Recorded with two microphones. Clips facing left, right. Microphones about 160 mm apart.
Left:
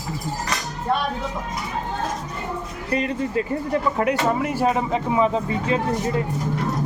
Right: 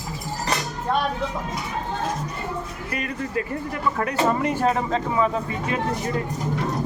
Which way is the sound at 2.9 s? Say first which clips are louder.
Left 5 dB; 25° left (ahead or behind).